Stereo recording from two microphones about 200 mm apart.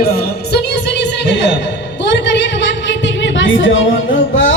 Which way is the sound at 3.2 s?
70° left (ahead or behind).